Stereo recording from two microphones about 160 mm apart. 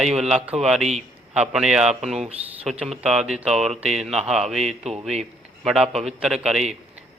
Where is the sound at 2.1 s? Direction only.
40° right (ahead or behind).